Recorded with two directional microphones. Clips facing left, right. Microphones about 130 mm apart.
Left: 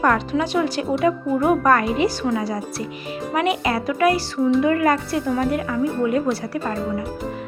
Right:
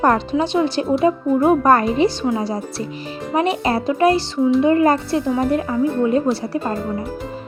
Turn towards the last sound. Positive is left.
turn(degrees=-30)  # may be behind; listen again after turning